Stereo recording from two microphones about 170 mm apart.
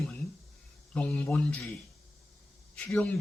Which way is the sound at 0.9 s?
10° left (ahead or behind).